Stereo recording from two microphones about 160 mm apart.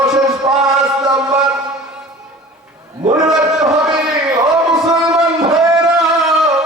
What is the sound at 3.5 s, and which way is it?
Chant, 5° right (ahead or behind).